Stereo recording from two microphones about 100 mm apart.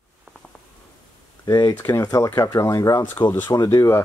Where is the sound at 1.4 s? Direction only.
40° left (ahead or behind).